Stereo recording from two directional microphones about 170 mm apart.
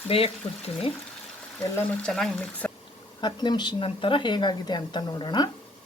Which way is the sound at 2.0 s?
5° left (ahead or behind).